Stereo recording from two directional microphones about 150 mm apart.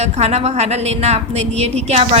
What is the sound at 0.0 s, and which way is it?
A woman's voice, 45° right (ahead or behind).